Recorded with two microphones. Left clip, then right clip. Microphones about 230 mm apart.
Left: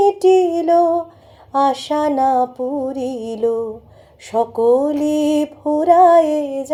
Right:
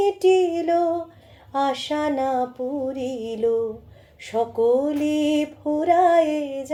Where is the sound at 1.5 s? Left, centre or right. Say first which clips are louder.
Left 7 dB; left.